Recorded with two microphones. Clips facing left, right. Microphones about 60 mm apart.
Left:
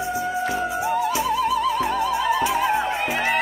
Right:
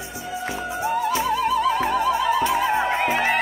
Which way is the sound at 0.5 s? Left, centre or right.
Centre.